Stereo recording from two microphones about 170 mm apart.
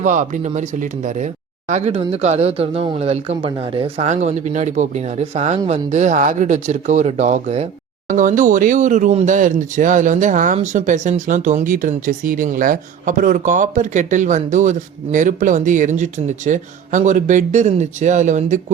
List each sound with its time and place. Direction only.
0.0 s speech: 45° right (ahead or behind)